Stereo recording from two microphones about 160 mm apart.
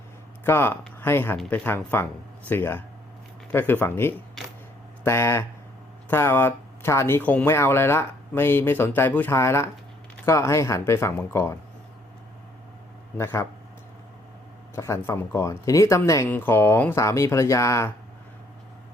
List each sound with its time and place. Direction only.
0.4 s speech: 15° left (ahead or behind)
13.1 s speech: 15° left (ahead or behind)
14.8 s speech: 15° left (ahead or behind)